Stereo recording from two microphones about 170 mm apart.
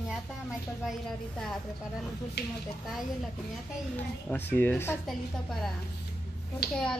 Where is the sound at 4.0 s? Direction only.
10° left (ahead or behind).